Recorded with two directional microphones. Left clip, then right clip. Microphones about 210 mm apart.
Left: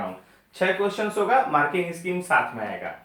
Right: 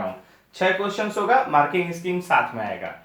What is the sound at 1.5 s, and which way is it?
Speech, 35° right (ahead or behind).